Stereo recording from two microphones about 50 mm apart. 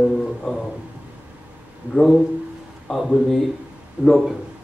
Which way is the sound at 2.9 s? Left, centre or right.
Centre.